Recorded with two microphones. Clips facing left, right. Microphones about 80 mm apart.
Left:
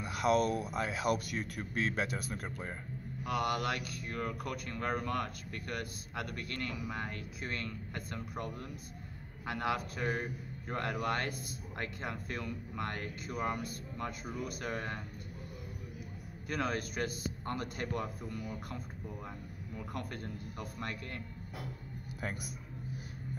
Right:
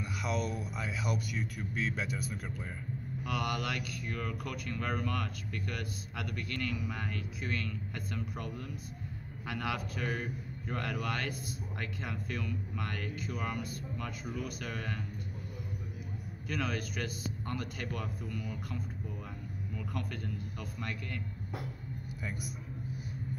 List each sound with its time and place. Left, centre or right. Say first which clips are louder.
0.2 s speech: left 7 dB; left
2.4 s speech: even; left
16.4 s speech: left 1 dB; left